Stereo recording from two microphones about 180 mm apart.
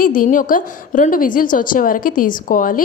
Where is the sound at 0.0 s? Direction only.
50° left (ahead or behind).